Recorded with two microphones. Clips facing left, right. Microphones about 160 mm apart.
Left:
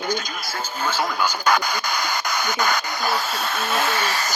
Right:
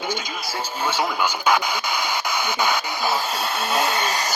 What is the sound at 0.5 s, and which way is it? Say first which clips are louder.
Speech: right 1 dB; 30° right (ahead or behind).